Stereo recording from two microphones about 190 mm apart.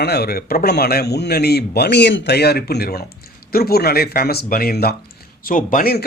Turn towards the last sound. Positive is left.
turn(degrees=50)  # may be behind; listen again after turning